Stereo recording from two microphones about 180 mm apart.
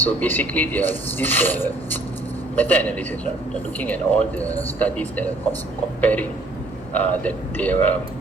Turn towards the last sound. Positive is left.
turn(degrees=10)  # may be behind; listen again after turning